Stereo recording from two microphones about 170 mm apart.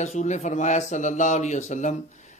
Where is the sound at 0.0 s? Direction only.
45° left (ahead or behind).